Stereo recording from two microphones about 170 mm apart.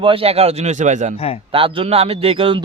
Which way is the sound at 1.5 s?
30° right (ahead or behind).